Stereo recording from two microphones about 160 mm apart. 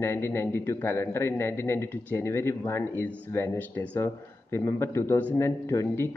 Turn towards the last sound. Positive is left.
turn(degrees=15)  # may be behind; listen again after turning